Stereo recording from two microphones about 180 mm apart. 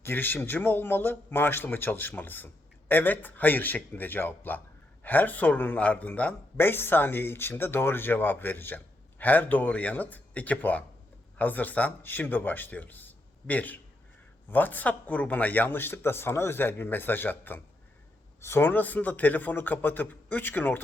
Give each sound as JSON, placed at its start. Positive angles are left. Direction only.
{"t": 0.0, "sound": "speech", "side_deg": 10}